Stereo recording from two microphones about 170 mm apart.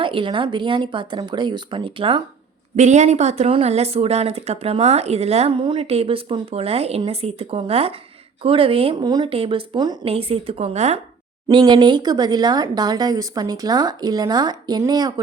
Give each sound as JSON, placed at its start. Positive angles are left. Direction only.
{"t": 0.0, "sound": "speech", "side_deg": -30}
{"t": 2.7, "sound": "speech", "side_deg": -45}
{"t": 11.4, "sound": "speech", "side_deg": -25}